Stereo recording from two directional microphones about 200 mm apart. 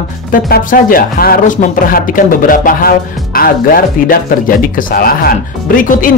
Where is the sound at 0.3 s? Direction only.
45° left (ahead or behind).